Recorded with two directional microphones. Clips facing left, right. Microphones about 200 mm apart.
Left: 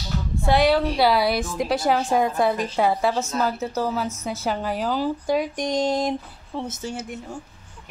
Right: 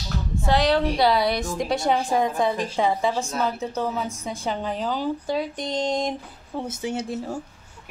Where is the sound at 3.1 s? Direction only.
10° right (ahead or behind).